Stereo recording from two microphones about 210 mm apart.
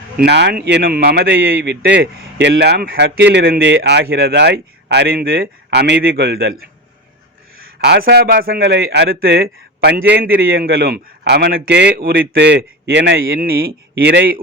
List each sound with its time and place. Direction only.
0.2 s a man's voice: 50° right (ahead or behind)